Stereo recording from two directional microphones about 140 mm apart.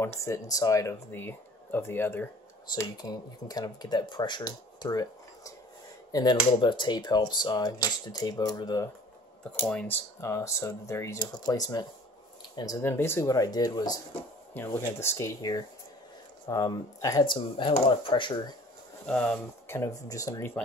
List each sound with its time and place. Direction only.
0.2 s speech: 25° left (ahead or behind)
2.8 s speech: 30° left (ahead or behind)
6.6 s speech: 35° left (ahead or behind)
9.4 s speech: 10° left (ahead or behind)
11.1 s speech: 30° left (ahead or behind)
12.8 s speech: 15° left (ahead or behind)
14.5 s speech: 15° left (ahead or behind)
17.2 s speech: 35° left (ahead or behind)
19.0 s speech: 10° left (ahead or behind)
19.8 s speech: 25° left (ahead or behind)